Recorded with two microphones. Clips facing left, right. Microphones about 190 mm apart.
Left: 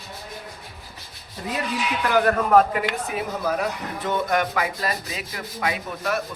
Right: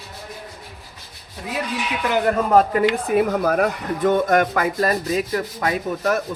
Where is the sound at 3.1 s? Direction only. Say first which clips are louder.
Right 8 dB; 60° right (ahead or behind).